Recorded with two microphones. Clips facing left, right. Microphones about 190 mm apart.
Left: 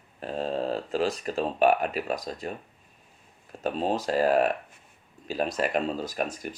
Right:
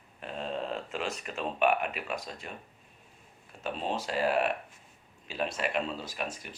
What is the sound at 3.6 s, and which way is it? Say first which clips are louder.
Speech: left 6 dB; 40° left (ahead or behind).